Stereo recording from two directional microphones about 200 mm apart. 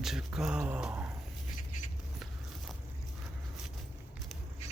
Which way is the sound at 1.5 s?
40° left (ahead or behind).